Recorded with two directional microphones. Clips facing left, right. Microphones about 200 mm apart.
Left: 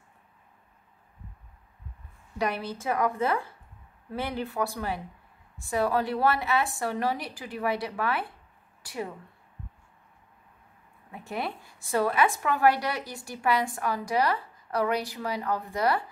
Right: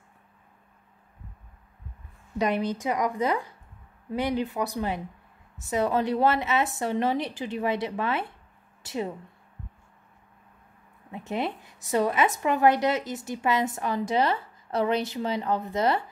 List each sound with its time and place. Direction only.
2.3 s a woman's voice: 20° right (ahead or behind)
11.1 s speech: 20° right (ahead or behind)